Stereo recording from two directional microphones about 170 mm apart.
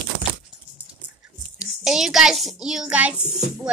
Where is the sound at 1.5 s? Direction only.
5° right (ahead or behind).